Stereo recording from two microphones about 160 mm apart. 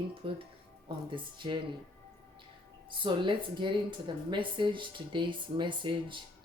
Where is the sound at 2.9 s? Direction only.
30° right (ahead or behind).